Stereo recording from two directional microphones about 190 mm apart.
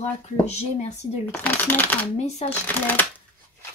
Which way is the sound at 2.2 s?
35° left (ahead or behind).